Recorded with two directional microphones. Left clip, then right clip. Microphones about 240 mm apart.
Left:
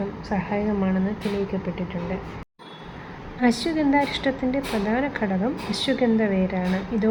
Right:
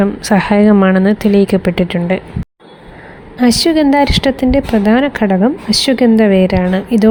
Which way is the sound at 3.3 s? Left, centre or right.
Right.